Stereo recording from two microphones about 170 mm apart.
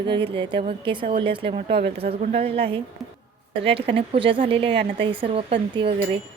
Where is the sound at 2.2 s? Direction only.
50° right (ahead or behind).